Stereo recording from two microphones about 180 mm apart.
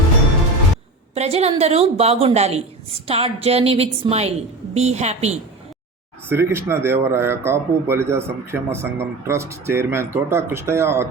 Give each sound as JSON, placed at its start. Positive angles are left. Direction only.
{"t": 1.1, "sound": "a woman's voice", "side_deg": -35}
{"t": 6.2, "sound": "a man's voice", "side_deg": -15}